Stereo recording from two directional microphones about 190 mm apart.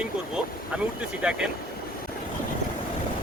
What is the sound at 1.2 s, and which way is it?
Speech, 5° right (ahead or behind).